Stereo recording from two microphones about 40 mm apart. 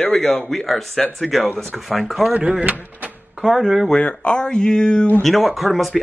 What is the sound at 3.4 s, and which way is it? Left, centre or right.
Speech, centre.